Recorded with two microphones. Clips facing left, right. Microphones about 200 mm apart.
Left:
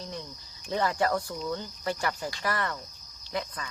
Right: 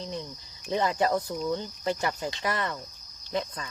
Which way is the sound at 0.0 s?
20° right (ahead or behind).